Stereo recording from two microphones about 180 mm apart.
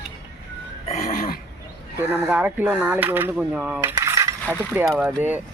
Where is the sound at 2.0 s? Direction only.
10° right (ahead or behind).